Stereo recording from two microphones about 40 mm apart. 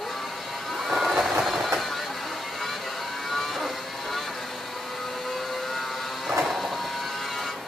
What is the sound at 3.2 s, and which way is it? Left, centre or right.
Vehicle, centre.